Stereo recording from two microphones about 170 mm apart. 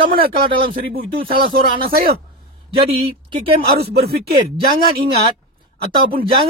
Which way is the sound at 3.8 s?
70° right (ahead or behind).